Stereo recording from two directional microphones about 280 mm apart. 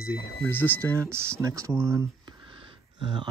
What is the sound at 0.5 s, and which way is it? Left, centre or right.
Speech, centre.